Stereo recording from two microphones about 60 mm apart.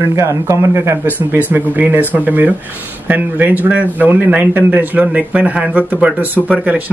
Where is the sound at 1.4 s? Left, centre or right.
Right.